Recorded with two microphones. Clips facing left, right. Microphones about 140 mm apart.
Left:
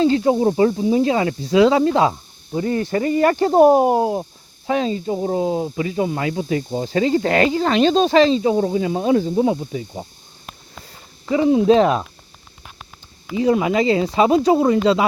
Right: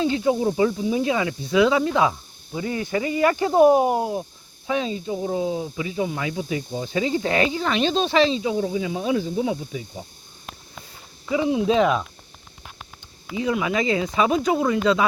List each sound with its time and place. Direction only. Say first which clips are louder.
0.0 s speech: left 5 dB; 40° left (ahead or behind)
4.1 s snake: left 4 dB; 45° left (ahead or behind)
5.0 s speech: left 4 dB; 40° left (ahead or behind)
11.3 s speech: left 6 dB; 40° left (ahead or behind)
13.3 s speech: left 6 dB; 35° left (ahead or behind)